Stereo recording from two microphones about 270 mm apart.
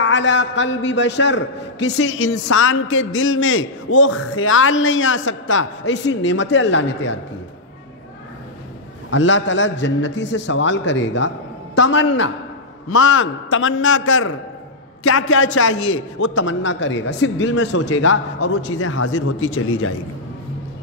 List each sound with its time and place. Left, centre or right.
0.0 s a man's voice: left
9.1 s a man's voice: left